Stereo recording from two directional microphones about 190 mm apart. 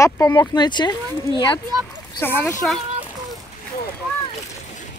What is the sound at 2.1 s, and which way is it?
Speech, 10° left (ahead or behind).